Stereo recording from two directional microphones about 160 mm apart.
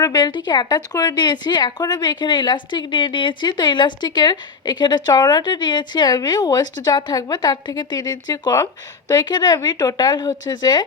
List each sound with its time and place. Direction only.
0.0 s speech: 25° left (ahead or behind)